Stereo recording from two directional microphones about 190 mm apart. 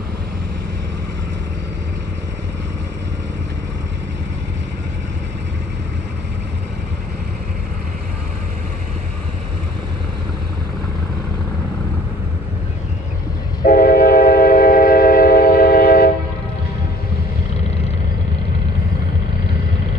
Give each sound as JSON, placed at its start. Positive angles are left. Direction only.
{"t": 13.7, "sound": "train", "side_deg": 50}